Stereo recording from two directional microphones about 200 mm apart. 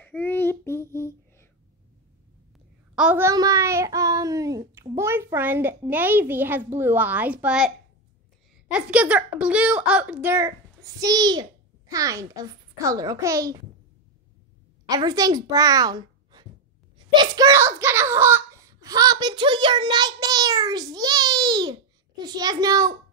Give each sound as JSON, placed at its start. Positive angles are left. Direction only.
{"t": 0.0, "sound": "child singing", "side_deg": 10}
{"t": 3.0, "sound": "a child's voice", "side_deg": -10}
{"t": 8.7, "sound": "a child's voice", "side_deg": -5}
{"t": 14.9, "sound": "a child's voice", "side_deg": -20}